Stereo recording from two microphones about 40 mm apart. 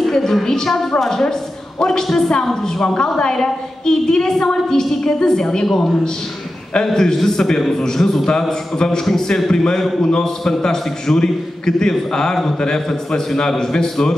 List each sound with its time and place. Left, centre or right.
0.1 s a man's voice: centre